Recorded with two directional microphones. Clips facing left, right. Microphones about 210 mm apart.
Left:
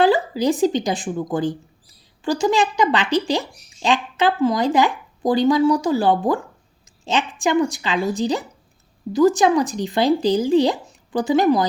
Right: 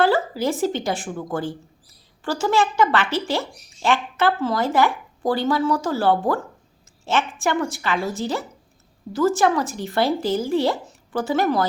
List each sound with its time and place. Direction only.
0.0 s speech: 15° left (ahead or behind)